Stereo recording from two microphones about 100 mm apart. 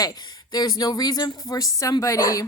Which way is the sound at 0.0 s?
40° left (ahead or behind).